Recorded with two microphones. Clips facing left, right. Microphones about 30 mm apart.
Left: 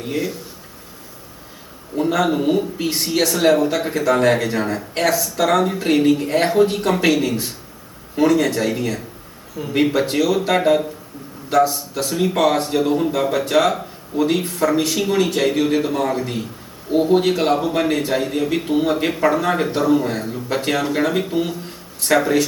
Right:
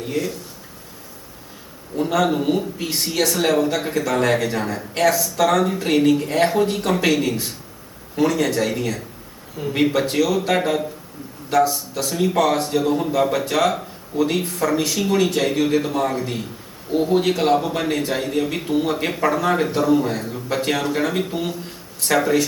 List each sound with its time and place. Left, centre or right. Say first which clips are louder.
0.1 s speech: left 1 dB; centre
2.0 s a man's voice: left 1 dB; centre
16.9 s a man's voice: left 3 dB; centre